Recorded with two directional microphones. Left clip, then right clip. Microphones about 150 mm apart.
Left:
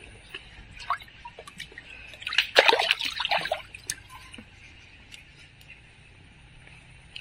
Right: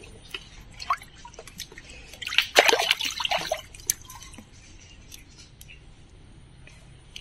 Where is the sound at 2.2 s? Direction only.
20° right (ahead or behind).